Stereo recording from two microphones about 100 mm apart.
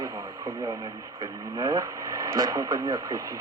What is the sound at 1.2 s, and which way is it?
Speech, 40° right (ahead or behind).